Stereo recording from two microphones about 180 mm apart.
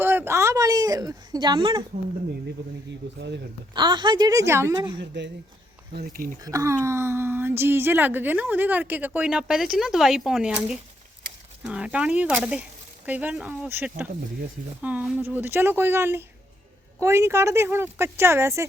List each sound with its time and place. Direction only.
0.0 s a sound: 10° right (ahead or behind)
3.2 s speech: 70° right (ahead or behind)
3.8 s a woman's voice: 25° right (ahead or behind)
4.9 s speech: 75° right (ahead or behind)
5.9 s speech: 60° right (ahead or behind)
6.4 s a woman's voice: 20° right (ahead or behind)